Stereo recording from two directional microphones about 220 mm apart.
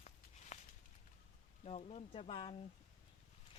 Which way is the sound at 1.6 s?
30° left (ahead or behind).